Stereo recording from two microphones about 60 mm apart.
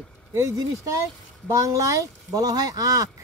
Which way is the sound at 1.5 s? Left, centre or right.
Right.